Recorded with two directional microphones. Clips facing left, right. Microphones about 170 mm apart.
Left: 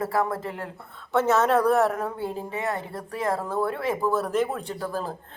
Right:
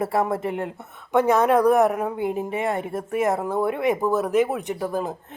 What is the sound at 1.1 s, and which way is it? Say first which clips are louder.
Speech: right 3 dB; 15° right (ahead or behind).